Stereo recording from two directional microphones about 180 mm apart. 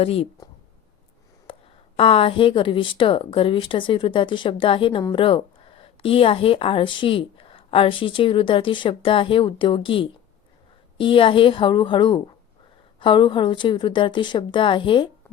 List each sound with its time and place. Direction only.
0.0 s speech: 30° left (ahead or behind)
1.5 s a sound: 30° left (ahead or behind)
2.0 s a woman's voice: 30° left (ahead or behind)